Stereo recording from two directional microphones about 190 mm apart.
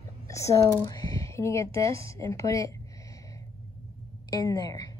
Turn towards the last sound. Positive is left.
turn(degrees=20)  # may be behind; listen again after turning